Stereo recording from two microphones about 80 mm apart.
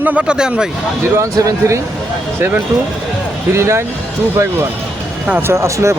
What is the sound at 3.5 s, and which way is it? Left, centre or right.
Speech, right.